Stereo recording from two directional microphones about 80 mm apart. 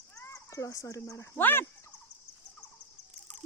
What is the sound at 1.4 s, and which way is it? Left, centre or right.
Speech, left.